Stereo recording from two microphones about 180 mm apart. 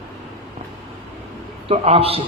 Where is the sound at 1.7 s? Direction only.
30° right (ahead or behind).